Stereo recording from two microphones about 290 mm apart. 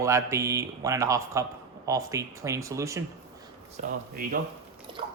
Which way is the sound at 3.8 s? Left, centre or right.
Right.